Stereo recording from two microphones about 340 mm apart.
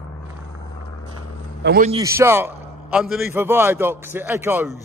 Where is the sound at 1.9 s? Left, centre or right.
Centre.